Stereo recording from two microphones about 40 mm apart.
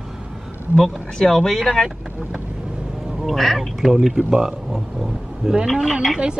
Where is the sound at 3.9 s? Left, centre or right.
Centre.